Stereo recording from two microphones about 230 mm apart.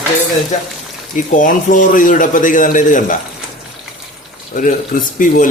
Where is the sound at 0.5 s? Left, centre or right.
Left.